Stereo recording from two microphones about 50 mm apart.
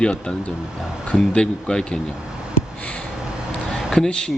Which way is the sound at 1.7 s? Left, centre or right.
Centre.